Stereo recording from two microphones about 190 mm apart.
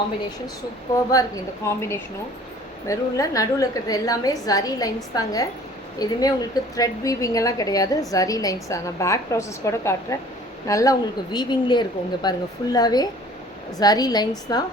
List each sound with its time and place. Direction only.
0.9 s a woman's voice: 20° left (ahead or behind)